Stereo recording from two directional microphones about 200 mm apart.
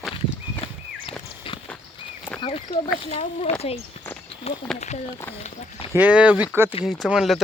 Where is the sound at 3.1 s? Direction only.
30° left (ahead or behind).